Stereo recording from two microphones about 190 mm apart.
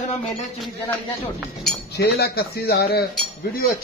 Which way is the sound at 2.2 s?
55° left (ahead or behind).